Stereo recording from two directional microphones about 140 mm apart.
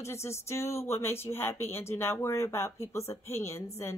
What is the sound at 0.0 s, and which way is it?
Speech, 20° left (ahead or behind).